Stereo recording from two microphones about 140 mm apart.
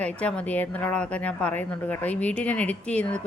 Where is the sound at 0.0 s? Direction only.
10° left (ahead or behind).